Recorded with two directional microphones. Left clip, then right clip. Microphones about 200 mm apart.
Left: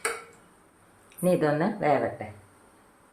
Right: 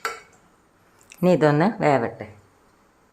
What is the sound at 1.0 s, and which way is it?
Speech, 50° right (ahead or behind).